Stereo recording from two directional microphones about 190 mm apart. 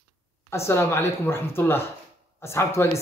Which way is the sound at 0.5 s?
15° left (ahead or behind).